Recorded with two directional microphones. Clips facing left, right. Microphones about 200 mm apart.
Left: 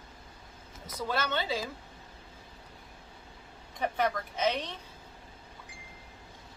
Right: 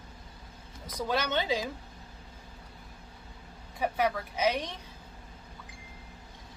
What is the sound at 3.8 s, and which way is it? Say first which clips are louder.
Speech: right 1 dB; 5° right (ahead or behind).